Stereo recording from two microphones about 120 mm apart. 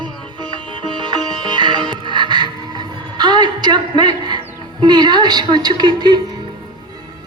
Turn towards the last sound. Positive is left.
turn(degrees=-35)  # may be behind; listen again after turning